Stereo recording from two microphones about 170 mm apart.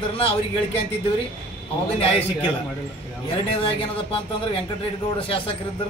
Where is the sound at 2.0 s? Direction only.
35° left (ahead or behind).